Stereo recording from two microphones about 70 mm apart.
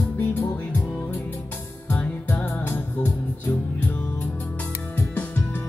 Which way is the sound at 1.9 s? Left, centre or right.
Left.